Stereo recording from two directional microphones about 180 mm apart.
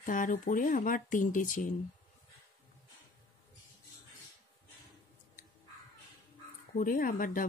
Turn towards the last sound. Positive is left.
turn(degrees=50)  # may be behind; listen again after turning